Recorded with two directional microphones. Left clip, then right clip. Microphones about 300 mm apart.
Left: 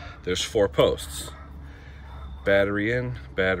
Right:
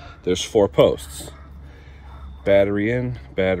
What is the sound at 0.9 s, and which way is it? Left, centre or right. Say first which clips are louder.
Speech: right 1 dB; centre.